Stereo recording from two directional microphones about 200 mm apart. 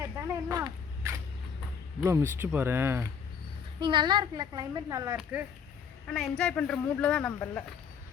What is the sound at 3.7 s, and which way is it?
A woman's voice, 25° right (ahead or behind).